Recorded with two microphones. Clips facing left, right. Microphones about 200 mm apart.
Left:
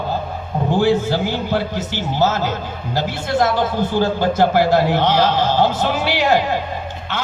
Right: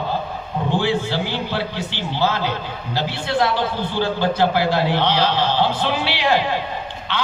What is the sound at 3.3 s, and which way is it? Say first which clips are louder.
A man's voice: left 3 dB; 45° left (ahead or behind).